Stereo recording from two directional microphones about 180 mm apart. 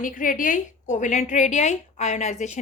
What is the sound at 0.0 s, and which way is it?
A woman's voice, 45° left (ahead or behind).